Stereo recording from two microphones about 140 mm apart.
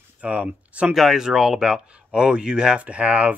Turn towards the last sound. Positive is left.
turn(degrees=-10)  # may be behind; listen again after turning